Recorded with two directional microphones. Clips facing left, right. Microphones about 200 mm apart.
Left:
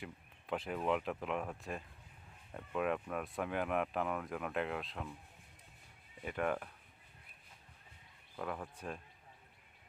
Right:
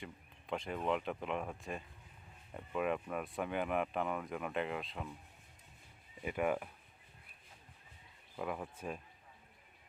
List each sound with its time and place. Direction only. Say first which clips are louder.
0.0 s speech: left 1 dB; 5° left (ahead or behind)
6.2 s speech: right 2 dB; 10° right (ahead or behind)
8.4 s speech: right 2 dB; 5° right (ahead or behind)